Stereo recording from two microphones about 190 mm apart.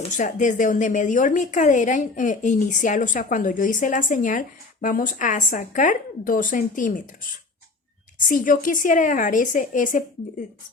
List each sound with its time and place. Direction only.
0.2 s a woman's voice: 45° left (ahead or behind)